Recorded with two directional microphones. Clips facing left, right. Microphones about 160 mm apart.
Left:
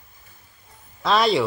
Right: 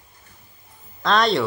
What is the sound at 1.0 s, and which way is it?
Speech, 5° left (ahead or behind).